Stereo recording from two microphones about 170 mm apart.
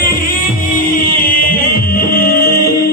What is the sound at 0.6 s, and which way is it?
Music, 55° left (ahead or behind).